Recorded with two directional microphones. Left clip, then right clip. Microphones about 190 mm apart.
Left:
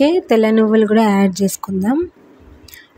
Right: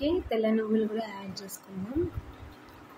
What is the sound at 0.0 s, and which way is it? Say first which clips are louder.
Speech: left 15 dB; 55° left (ahead or behind).